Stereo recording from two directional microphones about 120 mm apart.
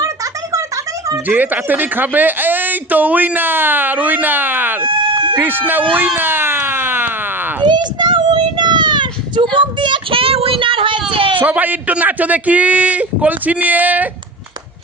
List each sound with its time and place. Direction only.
1.3 s speech: 15° right (ahead or behind)
4.9 s a sound: 45° right (ahead or behind)
5.4 s speech: 15° right (ahead or behind)
6.1 s siren: 20° right (ahead or behind)
7.6 s child singing: 40° right (ahead or behind)
11.1 s a sound: 45° right (ahead or behind)
11.4 s speech: 15° right (ahead or behind)